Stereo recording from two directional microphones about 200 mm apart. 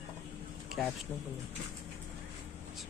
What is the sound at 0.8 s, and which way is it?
Speech, centre (ahead or behind).